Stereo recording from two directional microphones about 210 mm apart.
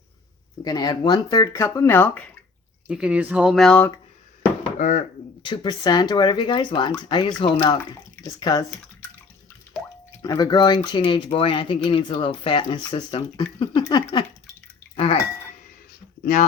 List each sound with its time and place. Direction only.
0.6 s speech: 20° left (ahead or behind)
2.8 s speech: 5° right (ahead or behind)
5.4 s speech: 20° left (ahead or behind)
10.2 s speech: 15° left (ahead or behind)
16.2 s speech: 40° left (ahead or behind)